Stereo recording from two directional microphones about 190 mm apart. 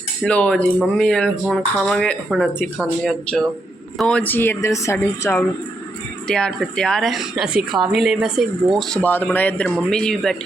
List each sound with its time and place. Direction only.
0.2 s speech: 5° left (ahead or behind)